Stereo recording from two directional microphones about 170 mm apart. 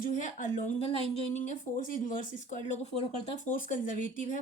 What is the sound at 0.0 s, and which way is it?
Speech, 50° left (ahead or behind).